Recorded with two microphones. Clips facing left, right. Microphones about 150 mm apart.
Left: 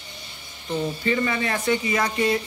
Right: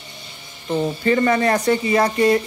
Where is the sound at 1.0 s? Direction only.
45° right (ahead or behind).